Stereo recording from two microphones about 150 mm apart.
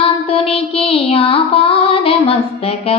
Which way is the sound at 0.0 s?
40° left (ahead or behind).